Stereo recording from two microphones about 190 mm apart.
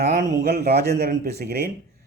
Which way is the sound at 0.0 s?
55° right (ahead or behind).